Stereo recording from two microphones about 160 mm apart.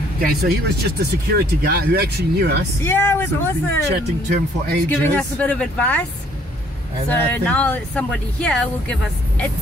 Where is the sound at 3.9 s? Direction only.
85° right.